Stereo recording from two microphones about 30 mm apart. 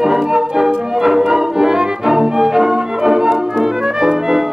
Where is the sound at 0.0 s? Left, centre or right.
Centre.